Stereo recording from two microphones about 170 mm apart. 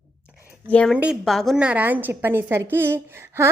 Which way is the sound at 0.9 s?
5° right (ahead or behind).